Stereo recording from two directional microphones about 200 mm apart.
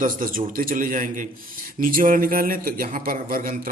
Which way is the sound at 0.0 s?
40° right (ahead or behind).